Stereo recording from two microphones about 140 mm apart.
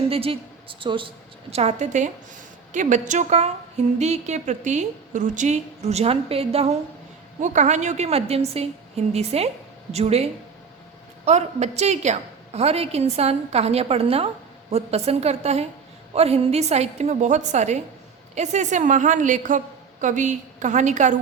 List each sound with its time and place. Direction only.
0.1 s a woman's voice: 40° right (ahead or behind)
7.4 s a woman's voice: 60° right (ahead or behind)
11.3 s a woman's voice: 50° right (ahead or behind)